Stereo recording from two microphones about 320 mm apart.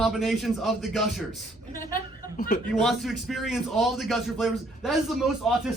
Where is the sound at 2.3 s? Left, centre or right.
Left.